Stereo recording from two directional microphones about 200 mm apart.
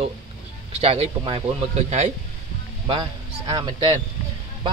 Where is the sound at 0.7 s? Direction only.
30° right (ahead or behind).